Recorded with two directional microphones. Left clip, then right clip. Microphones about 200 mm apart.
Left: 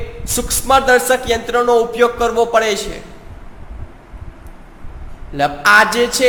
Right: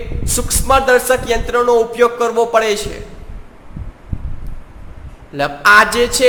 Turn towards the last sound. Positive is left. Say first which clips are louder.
# right 1 dB
turn(degrees=-15)  # may be behind; listen again after turning